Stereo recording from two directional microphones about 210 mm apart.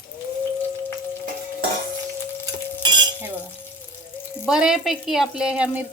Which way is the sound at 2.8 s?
20° right (ahead or behind).